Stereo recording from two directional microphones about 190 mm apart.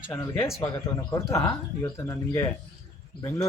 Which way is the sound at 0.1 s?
15° left (ahead or behind).